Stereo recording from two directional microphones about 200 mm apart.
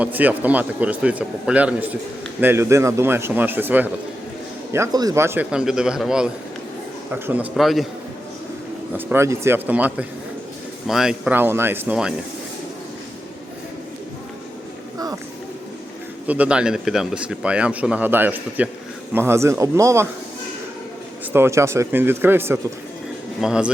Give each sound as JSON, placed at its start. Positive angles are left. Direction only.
{"t": 0.0, "sound": "a man's voice", "side_deg": -10}
{"t": 7.5, "sound": "a man's voice", "side_deg": 0}
{"t": 9.0, "sound": "a man's voice", "side_deg": -10}
{"t": 14.9, "sound": "a sound", "side_deg": -20}
{"t": 16.2, "sound": "a man's voice", "side_deg": -5}
{"t": 21.3, "sound": "a man's voice", "side_deg": -15}